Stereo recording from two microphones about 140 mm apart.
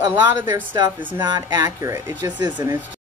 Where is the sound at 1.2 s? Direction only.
30° right (ahead or behind).